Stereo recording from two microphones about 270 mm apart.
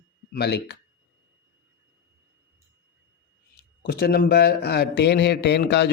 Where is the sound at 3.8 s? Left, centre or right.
Left.